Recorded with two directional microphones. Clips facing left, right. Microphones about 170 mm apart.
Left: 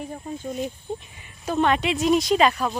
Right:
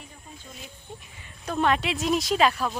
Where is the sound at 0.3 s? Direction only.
60° left (ahead or behind).